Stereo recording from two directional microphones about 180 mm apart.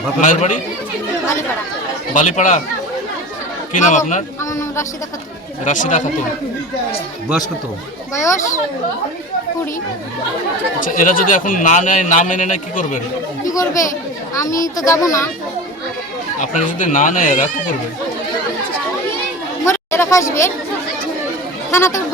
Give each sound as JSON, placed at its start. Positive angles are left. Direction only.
{"t": 0.2, "sound": "a man's voice", "side_deg": 45}
{"t": 2.1, "sound": "a man's voice", "side_deg": 45}
{"t": 3.8, "sound": "a man's voice", "side_deg": 45}
{"t": 5.6, "sound": "a man's voice", "side_deg": 45}
{"t": 8.1, "sound": "speech", "side_deg": 15}
{"t": 10.8, "sound": "a man's voice", "side_deg": 50}
{"t": 13.4, "sound": "speech", "side_deg": 20}
{"t": 16.4, "sound": "a man's voice", "side_deg": 45}
{"t": 19.6, "sound": "a sound", "side_deg": 15}
{"t": 21.7, "sound": "speech", "side_deg": 15}